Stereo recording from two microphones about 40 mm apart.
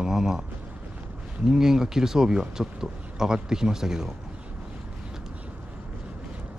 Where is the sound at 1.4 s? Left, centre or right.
Centre.